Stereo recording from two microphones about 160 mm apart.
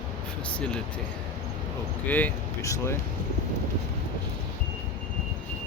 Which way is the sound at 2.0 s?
10° left (ahead or behind).